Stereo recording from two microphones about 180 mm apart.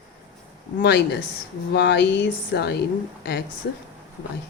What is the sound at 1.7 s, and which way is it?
Speech, 70° left (ahead or behind).